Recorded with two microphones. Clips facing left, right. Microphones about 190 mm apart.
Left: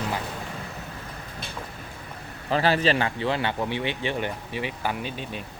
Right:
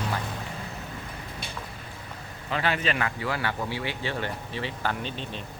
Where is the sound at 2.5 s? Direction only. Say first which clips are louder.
Left 6 dB; 35° left (ahead or behind); by 5.4 s 10° left (ahead or behind).